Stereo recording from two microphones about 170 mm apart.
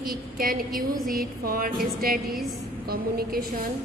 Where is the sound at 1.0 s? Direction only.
60° right (ahead or behind).